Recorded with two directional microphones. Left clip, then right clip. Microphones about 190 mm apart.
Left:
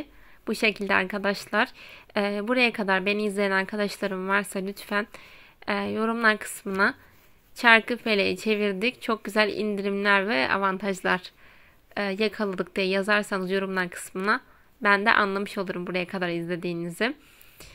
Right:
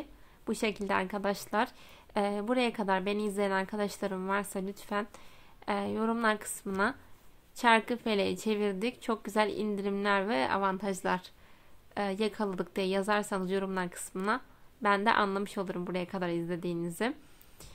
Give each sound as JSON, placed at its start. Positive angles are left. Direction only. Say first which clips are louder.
{"t": 0.5, "sound": "a woman's voice", "louder": "left 8 dB", "side_deg": 20}